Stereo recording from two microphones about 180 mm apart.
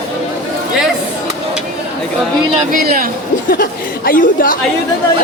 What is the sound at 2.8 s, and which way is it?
Speech, 50° right (ahead or behind).